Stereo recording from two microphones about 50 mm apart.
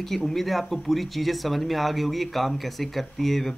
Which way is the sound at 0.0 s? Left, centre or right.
Centre.